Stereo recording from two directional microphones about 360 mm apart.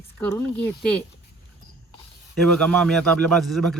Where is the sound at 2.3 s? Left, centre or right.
Centre.